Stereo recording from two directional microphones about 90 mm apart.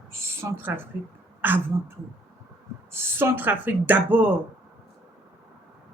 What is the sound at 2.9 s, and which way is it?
Speech, 25° right (ahead or behind).